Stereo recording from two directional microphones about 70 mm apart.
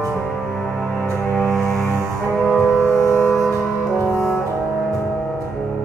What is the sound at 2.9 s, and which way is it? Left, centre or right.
Music, left.